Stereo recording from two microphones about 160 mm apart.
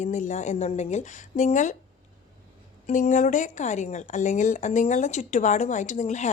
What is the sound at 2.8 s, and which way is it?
A woman's voice, 50° left (ahead or behind).